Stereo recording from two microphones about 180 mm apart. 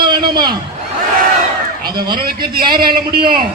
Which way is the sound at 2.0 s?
25° right (ahead or behind).